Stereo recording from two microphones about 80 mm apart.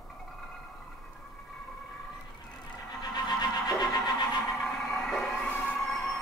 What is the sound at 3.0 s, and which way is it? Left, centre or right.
Music, left.